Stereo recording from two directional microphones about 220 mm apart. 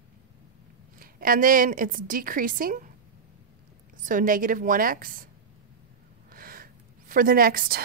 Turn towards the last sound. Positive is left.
turn(degrees=-40)  # may be behind; listen again after turning